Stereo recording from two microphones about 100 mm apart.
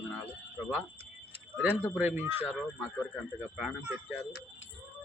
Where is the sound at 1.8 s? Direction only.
15° right (ahead or behind).